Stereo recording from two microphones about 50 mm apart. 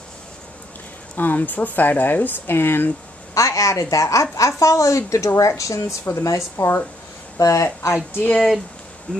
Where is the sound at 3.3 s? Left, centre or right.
Left.